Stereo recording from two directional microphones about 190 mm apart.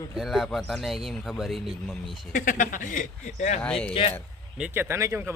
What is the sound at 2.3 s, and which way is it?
Speech, 45° left (ahead or behind).